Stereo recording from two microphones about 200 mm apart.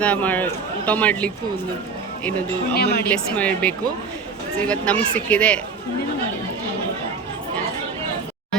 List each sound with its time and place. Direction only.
0.0 s a man's voice: 10° left (ahead or behind)
2.7 s speech: 50° left (ahead or behind)
3.1 s a man's voice: 5° left (ahead or behind)